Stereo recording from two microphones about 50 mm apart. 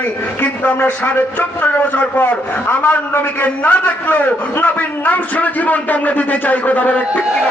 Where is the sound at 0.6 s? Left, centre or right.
Left.